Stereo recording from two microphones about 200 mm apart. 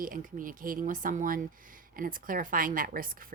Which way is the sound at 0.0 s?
45° right (ahead or behind).